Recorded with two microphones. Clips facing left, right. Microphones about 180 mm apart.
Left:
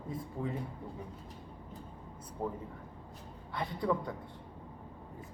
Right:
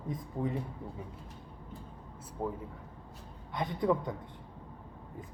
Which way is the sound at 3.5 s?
20° right (ahead or behind).